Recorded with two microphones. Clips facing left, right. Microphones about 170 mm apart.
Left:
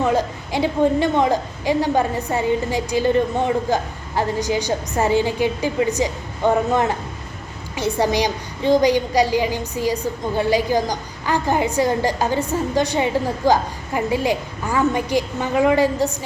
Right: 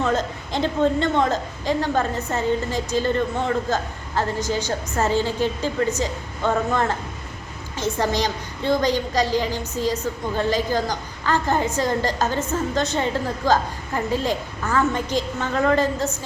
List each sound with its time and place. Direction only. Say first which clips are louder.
0.0 s a woman's voice: left 3 dB; 10° left (ahead or behind)